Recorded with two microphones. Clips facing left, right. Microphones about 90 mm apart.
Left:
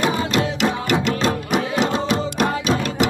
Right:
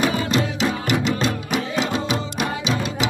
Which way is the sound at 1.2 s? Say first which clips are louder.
Left 3 dB; 45° left (ahead or behind).